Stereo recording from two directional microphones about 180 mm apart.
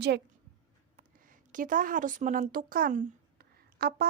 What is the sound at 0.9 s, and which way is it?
Speech, 45° right (ahead or behind).